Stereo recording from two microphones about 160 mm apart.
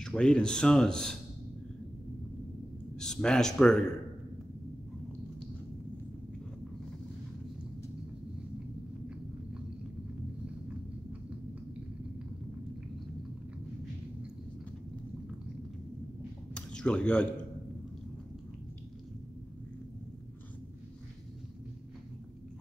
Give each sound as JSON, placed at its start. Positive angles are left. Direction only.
{"t": 0.0, "sound": "speech", "side_deg": 5}
{"t": 3.0, "sound": "a man's voice", "side_deg": 5}
{"t": 16.5, "sound": "a sound", "side_deg": 5}